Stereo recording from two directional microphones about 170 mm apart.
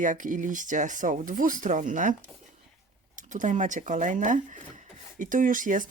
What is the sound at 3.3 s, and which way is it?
Speech, 45° right (ahead or behind).